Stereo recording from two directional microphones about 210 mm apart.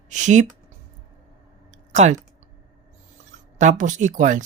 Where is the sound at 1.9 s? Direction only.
35° right (ahead or behind).